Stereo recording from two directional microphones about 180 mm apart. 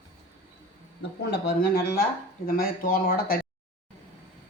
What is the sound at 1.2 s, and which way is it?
Speech, 70° left (ahead or behind).